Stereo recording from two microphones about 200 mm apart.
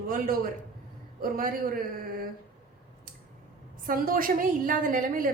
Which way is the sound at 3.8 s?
45° right (ahead or behind).